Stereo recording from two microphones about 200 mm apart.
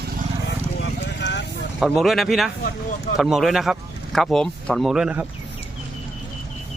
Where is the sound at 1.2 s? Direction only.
60° left (ahead or behind).